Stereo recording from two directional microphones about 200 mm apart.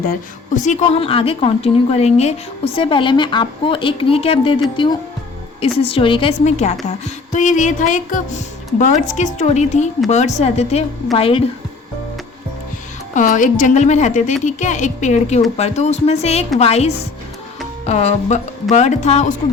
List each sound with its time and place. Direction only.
0.0 s speech: 40° left (ahead or behind)
13.1 s speech: 40° left (ahead or behind)